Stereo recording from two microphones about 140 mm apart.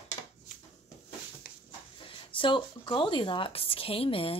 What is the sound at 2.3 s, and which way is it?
A woman's voice, 35° left (ahead or behind).